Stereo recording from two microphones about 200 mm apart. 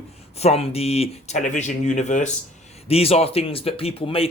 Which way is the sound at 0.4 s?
30° left (ahead or behind).